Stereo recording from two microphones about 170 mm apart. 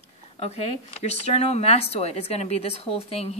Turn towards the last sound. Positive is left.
turn(degrees=35)  # may be behind; listen again after turning